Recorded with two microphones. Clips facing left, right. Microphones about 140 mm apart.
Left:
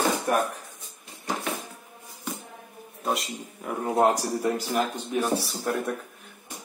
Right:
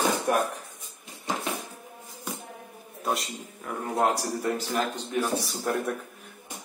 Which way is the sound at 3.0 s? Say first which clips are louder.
Left 1 dB; centre (ahead or behind).